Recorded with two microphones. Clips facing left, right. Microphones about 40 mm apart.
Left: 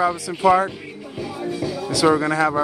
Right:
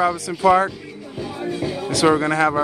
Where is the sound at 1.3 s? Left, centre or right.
Right.